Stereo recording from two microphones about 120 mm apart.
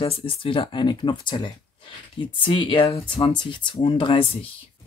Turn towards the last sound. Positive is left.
turn(degrees=50)  # may be behind; listen again after turning